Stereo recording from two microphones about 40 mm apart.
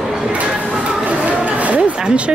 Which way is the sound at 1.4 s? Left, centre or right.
Right.